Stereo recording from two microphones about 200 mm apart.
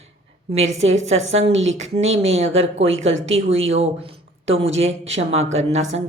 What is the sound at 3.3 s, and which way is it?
Speech, 30° right (ahead or behind).